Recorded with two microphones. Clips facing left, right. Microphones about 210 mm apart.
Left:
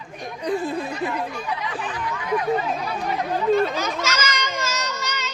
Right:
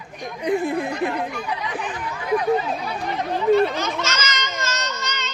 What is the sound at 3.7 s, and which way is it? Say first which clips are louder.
Children playing: even; 10° left (ahead or behind).